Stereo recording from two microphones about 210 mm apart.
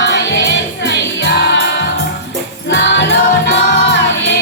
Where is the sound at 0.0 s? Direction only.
55° left (ahead or behind).